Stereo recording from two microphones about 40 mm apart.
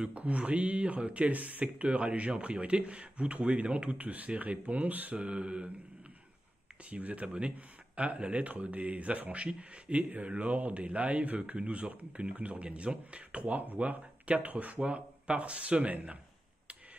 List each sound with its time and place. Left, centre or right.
0.2 s speech: right
4.0 s speech: right
5.2 s mantra: right
6.9 s speech: right
7.3 s speech: right
15.2 s speech: right